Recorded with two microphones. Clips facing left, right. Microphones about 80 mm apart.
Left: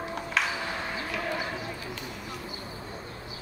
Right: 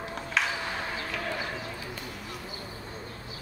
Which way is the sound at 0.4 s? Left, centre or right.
Centre.